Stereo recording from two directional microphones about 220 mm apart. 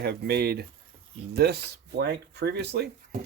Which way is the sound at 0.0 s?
45° right (ahead or behind).